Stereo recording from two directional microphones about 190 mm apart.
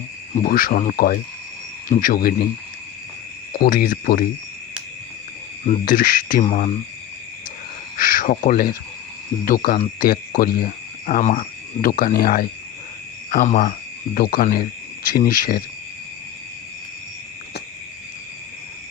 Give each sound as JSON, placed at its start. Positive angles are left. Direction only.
{"t": 0.3, "sound": "speech", "side_deg": 45}
{"t": 3.6, "sound": "speech", "side_deg": 50}
{"t": 5.6, "sound": "speech", "side_deg": 40}
{"t": 7.9, "sound": "speech", "side_deg": 45}